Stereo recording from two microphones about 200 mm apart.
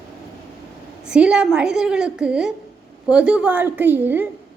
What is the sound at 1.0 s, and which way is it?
A woman's voice, 5° right (ahead or behind).